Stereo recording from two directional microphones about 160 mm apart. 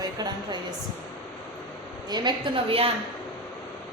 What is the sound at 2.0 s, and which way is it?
Speech, 25° right (ahead or behind).